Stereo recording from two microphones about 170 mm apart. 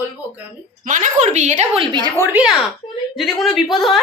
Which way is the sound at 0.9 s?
50° right (ahead or behind).